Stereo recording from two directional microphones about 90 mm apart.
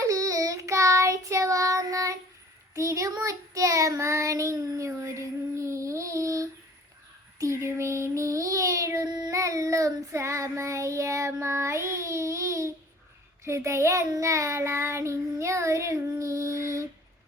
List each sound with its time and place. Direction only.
0.0 s child singing: 40° right (ahead or behind)